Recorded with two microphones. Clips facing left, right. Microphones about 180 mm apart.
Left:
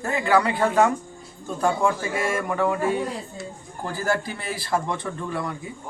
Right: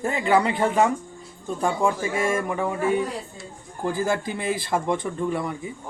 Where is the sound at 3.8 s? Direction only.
15° right (ahead or behind).